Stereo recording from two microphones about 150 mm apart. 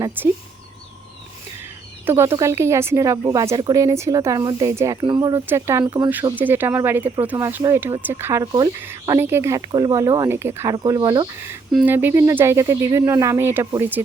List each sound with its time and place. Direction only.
0.2 s speech: 15° right (ahead or behind)
2.0 s speech: 15° right (ahead or behind)
5.3 s speech: 15° right (ahead or behind)
11.9 s speech: 15° right (ahead or behind)